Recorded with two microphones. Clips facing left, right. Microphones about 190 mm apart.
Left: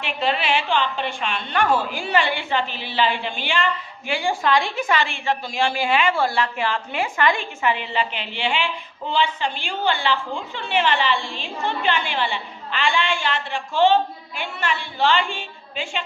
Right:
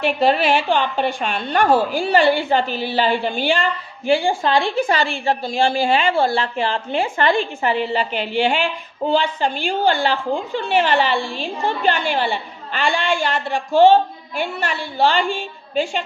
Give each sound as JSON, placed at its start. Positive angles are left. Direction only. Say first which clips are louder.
{"t": 0.0, "sound": "a woman's voice", "louder": "right 7 dB", "side_deg": -40}
{"t": 11.1, "sound": "a woman's voice", "louder": "right 3 dB", "side_deg": -5}
{"t": 11.6, "sound": "a woman's voice", "louder": "right 3 dB", "side_deg": -40}